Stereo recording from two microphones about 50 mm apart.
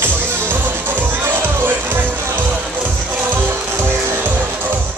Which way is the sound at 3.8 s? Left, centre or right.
Right.